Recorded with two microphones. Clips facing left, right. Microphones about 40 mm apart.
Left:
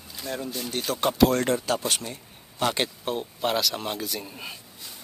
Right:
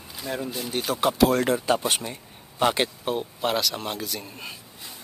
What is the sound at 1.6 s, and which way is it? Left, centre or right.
Speech, centre.